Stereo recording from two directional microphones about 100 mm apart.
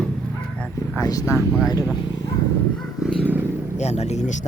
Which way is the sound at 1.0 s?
40° left (ahead or behind).